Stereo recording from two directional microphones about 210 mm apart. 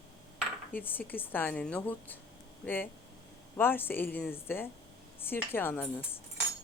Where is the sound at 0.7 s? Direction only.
10° left (ahead or behind).